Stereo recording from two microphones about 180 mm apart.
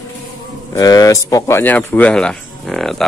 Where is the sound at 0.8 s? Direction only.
20° left (ahead or behind); by 2.9 s centre (ahead or behind).